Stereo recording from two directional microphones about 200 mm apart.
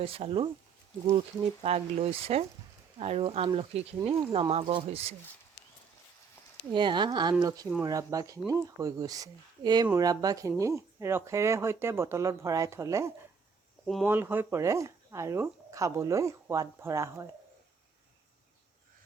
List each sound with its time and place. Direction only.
0.0 s speech: 30° right (ahead or behind)
1.6 s speech: 30° right (ahead or behind)
6.7 s speech: 20° right (ahead or behind)
13.8 s speech: centre (ahead or behind)
14.1 s speech: 10° right (ahead or behind)